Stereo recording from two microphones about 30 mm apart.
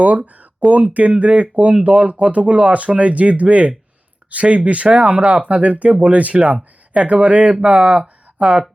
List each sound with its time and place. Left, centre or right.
0.0 s speech: right
1.2 s speech: right
6.3 s speech: right